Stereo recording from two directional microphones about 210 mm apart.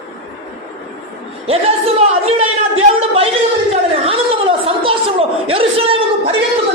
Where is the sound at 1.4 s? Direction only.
30° right (ahead or behind).